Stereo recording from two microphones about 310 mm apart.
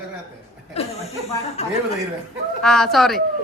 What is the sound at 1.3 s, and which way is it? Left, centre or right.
Speech, centre.